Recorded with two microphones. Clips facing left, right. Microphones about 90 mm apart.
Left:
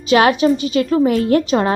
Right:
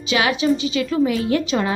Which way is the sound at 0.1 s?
45° left (ahead or behind).